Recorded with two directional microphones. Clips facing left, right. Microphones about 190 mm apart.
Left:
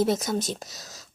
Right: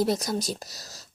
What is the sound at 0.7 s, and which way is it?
Speech, 20° left (ahead or behind).